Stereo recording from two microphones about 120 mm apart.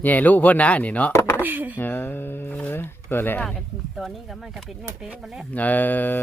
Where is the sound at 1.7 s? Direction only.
15° left (ahead or behind).